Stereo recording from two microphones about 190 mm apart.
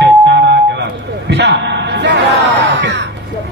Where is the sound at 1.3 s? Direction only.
65° right (ahead or behind).